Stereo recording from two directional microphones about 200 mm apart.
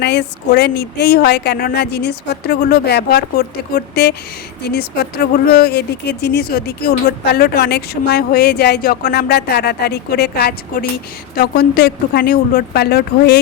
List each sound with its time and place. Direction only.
0.0 s speech: 60° left (ahead or behind)